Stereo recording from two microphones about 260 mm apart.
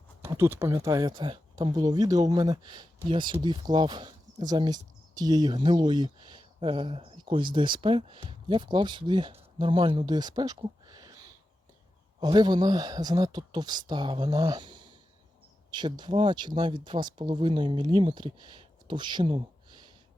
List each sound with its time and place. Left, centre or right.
0.2 s speech: centre